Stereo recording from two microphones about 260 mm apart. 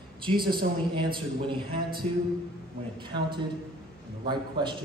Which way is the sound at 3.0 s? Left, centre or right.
Centre.